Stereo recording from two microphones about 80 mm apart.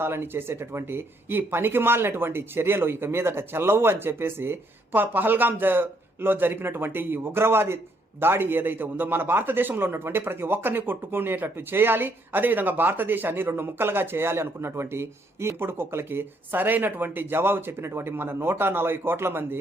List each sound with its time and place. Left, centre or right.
0.0 s a man's voice: right